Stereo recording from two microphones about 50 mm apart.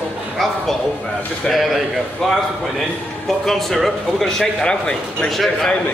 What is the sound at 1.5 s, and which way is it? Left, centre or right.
Speech, centre.